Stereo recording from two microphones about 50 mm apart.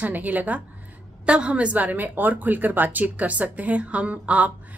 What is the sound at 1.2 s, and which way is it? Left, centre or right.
A woman's voice, right.